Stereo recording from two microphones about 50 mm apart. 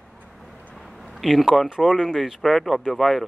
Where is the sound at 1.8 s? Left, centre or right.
Centre.